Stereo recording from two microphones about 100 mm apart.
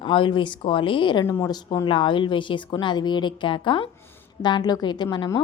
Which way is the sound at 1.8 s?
55° left (ahead or behind).